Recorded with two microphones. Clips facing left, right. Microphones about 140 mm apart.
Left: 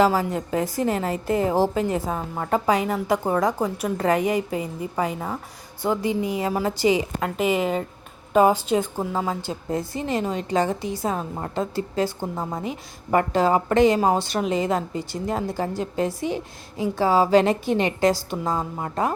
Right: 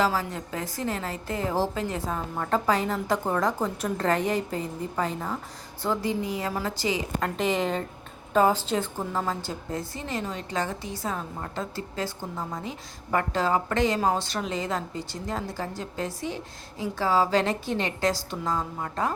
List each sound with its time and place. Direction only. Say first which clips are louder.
0.0 s a woman's voice: left 6 dB; 15° left (ahead or behind)